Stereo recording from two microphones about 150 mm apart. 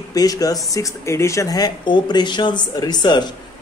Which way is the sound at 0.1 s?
25° left (ahead or behind).